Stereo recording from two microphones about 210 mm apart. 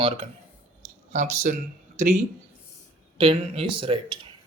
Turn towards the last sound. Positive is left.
turn(degrees=-25)  # may be behind; listen again after turning